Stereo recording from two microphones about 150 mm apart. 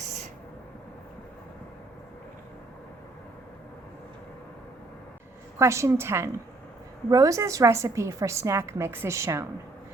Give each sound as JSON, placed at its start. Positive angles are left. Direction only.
{"t": 5.5, "sound": "a woman's voice", "side_deg": -20}